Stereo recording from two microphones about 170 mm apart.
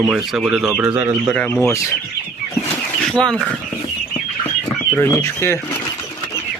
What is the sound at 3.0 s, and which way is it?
Speech, 5° left (ahead or behind).